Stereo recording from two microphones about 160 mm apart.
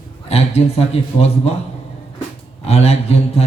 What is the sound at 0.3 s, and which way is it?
Speech, 40° left (ahead or behind).